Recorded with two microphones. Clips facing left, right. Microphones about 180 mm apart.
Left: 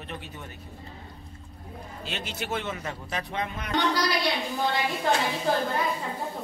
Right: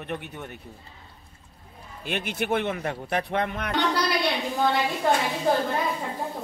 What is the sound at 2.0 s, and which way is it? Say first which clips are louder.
Speech: right 7 dB; 55° right (ahead or behind).